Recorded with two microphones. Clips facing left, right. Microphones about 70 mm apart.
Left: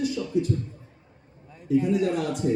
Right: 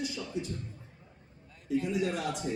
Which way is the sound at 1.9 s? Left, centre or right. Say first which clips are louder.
Left 7 dB; left.